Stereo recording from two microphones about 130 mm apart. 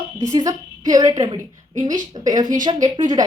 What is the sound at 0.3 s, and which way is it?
A woman's voice, 25° right (ahead or behind).